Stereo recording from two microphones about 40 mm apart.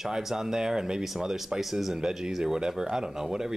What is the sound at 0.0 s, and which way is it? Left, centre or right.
Speech, centre.